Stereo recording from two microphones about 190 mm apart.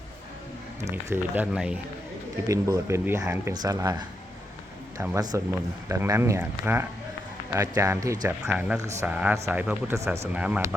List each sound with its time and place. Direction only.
1.1 s speech: 5° right (ahead or behind)
2.5 s speech: 15° right (ahead or behind)
8.4 s speech: 5° right (ahead or behind)